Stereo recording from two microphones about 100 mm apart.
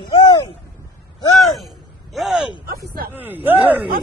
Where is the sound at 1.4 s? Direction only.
Centre (ahead or behind).